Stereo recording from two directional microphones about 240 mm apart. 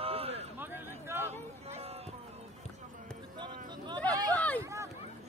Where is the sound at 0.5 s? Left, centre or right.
Centre.